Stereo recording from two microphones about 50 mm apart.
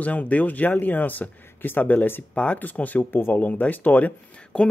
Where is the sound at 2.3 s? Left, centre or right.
Left.